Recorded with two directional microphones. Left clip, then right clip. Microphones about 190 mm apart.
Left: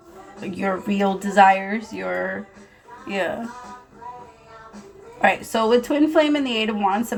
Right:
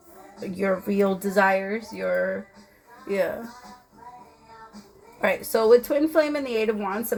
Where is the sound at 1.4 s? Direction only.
40° right (ahead or behind).